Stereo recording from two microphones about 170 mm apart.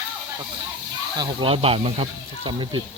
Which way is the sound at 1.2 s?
35° right (ahead or behind).